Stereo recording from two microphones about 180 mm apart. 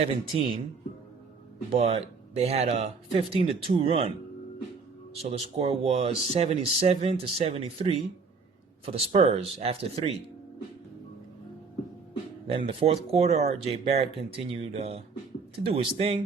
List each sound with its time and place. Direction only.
0.0 s speech: 30° right (ahead or behind)
1.7 s speech: 35° right (ahead or behind)
5.2 s speech: 35° right (ahead or behind)
12.5 s speech: 30° right (ahead or behind)